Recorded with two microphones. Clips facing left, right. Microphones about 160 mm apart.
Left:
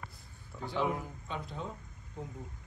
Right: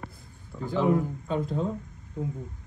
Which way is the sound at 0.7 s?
40° right (ahead or behind).